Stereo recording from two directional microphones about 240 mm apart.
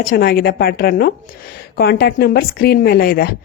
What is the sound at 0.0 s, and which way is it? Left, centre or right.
A woman's voice, left.